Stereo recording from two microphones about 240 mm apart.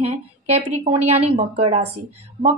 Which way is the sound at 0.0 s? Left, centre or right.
Right.